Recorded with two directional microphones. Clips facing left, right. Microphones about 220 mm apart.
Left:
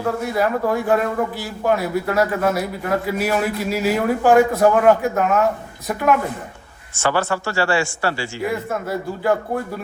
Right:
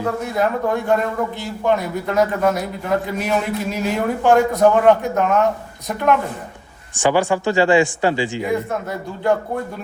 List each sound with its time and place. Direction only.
0.2 s a man's voice: 5° left (ahead or behind)
6.9 s a man's voice: 15° right (ahead or behind)